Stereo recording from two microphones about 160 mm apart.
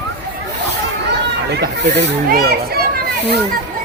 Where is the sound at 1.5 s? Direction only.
90° right.